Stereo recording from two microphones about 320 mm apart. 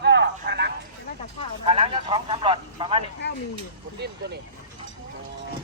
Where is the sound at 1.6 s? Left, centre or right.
Centre.